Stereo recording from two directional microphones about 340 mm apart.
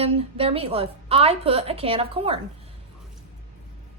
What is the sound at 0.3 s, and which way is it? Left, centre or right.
A child's voice, centre.